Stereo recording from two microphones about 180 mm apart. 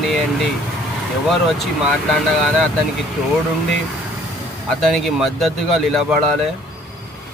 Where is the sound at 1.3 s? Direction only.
Centre (ahead or behind).